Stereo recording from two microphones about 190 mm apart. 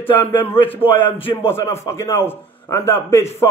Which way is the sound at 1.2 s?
30° left (ahead or behind).